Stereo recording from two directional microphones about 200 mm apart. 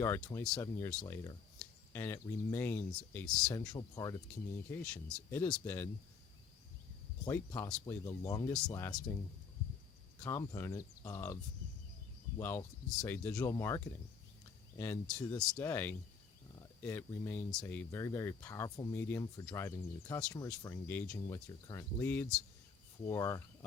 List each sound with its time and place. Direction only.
0.0 s speech: 15° left (ahead or behind)
3.5 s speech: 20° left (ahead or behind)
4.7 s speech: 5° left (ahead or behind)
7.3 s speech: 10° left (ahead or behind)
10.2 s speech: 15° left (ahead or behind)
12.4 s speech: 10° left (ahead or behind)